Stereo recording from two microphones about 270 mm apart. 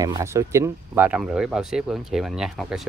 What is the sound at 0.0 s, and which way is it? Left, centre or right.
Speech, centre.